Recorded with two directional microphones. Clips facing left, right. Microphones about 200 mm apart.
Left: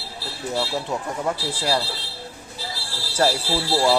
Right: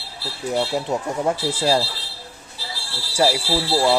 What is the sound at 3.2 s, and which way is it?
Speech, 10° right (ahead or behind).